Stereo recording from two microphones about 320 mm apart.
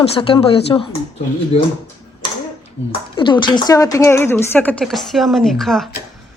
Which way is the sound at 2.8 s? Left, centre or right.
Left.